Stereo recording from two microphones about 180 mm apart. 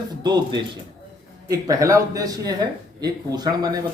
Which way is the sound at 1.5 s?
20° right (ahead or behind).